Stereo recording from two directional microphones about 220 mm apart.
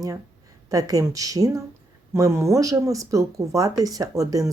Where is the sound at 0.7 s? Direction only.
15° right (ahead or behind).